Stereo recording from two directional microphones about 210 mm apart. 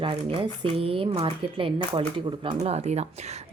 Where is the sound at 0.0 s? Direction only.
25° right (ahead or behind).